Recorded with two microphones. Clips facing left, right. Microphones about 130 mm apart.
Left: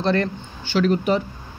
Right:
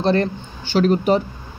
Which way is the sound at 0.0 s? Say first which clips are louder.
Right 3 dB; 30° right (ahead or behind).